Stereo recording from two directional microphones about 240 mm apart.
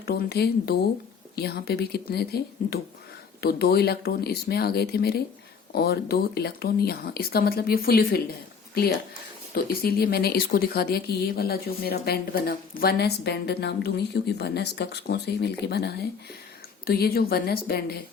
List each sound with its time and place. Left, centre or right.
0.0 s speech: left